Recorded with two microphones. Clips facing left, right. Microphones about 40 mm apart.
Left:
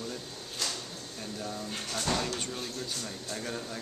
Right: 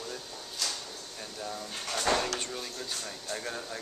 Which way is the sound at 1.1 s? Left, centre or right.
Centre.